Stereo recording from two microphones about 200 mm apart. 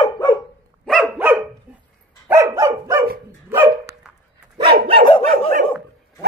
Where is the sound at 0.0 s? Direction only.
20° left (ahead or behind).